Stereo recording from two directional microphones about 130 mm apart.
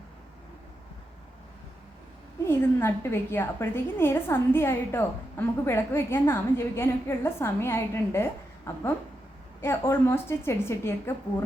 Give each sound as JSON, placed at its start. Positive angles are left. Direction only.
{"t": 2.4, "sound": "a woman's voice", "side_deg": 20}